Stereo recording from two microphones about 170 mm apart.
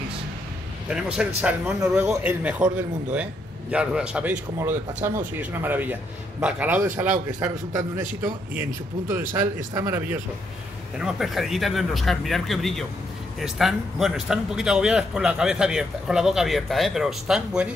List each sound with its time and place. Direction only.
0.8 s a man's voice: 5° right (ahead or behind)
7.9 s a man's voice: 15° right (ahead or behind)
9.8 s a man's voice: 10° right (ahead or behind)